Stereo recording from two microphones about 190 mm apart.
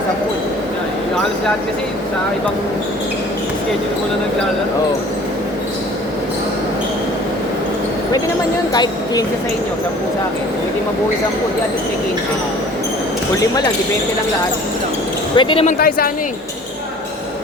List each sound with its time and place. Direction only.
8.7 s speech: 20° left (ahead or behind)
15.4 s speech: 25° left (ahead or behind)
15.6 s speech: 50° left (ahead or behind)